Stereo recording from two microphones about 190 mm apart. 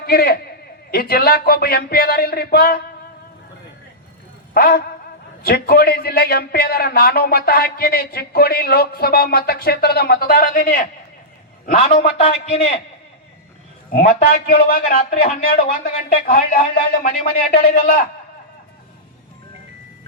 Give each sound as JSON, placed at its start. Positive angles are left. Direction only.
{"t": 0.0, "sound": "a man's voice", "side_deg": 55}
{"t": 4.5, "sound": "a man's voice", "side_deg": 50}
{"t": 13.9, "sound": "a man's voice", "side_deg": 50}